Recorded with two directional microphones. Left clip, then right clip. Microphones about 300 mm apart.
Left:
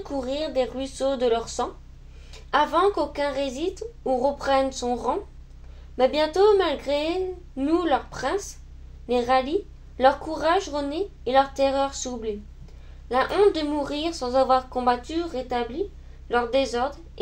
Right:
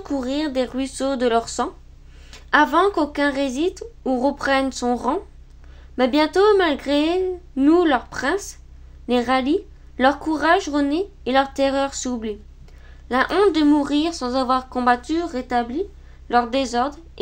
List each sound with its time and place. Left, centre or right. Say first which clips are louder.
0.0 s a woman's voice: right 3 dB; right